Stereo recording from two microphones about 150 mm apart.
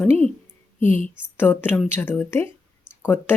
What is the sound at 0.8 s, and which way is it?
Speech, 60° left (ahead or behind).